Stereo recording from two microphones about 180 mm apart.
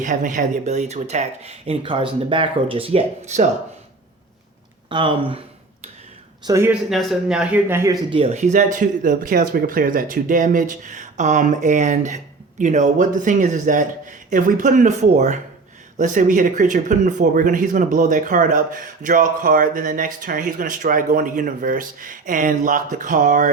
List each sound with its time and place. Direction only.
0.0 s speech: 45° right (ahead or behind)
4.9 s speech: 25° right (ahead or behind)
6.4 s speech: 15° right (ahead or behind)
6.9 s speech: centre (ahead or behind)
8.1 s speech: 35° right (ahead or behind)